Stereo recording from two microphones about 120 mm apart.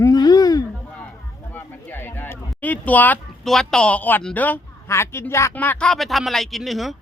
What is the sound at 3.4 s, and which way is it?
Speech, 5° left (ahead or behind).